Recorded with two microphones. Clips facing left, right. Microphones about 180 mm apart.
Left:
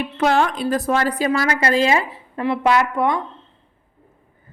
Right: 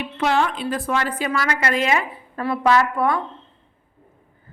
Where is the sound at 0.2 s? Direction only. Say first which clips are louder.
Left 3 dB; 45° left (ahead or behind).